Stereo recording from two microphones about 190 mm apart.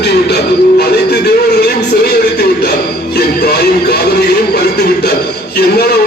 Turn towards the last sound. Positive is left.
turn(degrees=60)  # may be behind; listen again after turning